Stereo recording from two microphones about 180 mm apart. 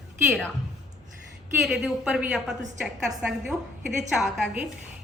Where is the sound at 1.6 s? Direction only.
Centre (ahead or behind).